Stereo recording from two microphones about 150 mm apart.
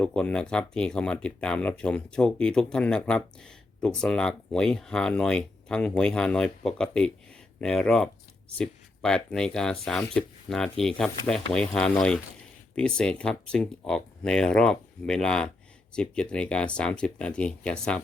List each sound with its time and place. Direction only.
0.0 s speech: 5° left (ahead or behind)